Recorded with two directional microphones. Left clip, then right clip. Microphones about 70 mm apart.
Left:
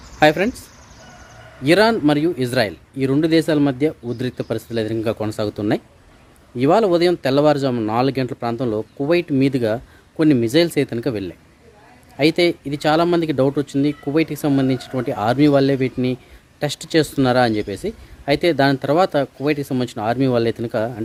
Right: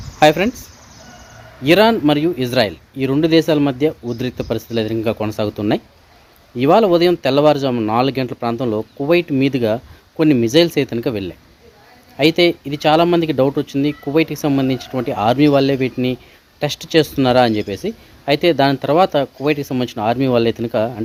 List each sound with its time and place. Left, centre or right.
0.2 s speech: centre
1.6 s speech: left